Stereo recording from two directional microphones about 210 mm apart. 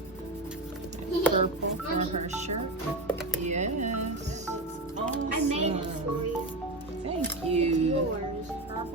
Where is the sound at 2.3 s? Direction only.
35° right (ahead or behind).